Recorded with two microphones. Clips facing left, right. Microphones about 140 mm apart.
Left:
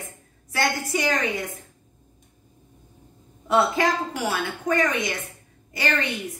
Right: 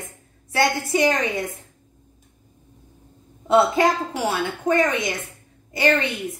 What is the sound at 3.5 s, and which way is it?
A woman's voice, 25° right (ahead or behind).